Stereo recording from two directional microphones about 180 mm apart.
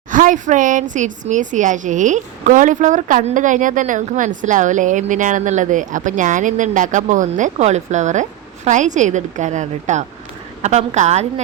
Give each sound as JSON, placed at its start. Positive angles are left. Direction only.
{"t": 0.1, "sound": "a woman's voice", "side_deg": -45}